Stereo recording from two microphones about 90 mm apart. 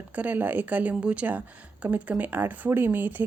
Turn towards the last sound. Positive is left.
turn(degrees=-20)  # may be behind; listen again after turning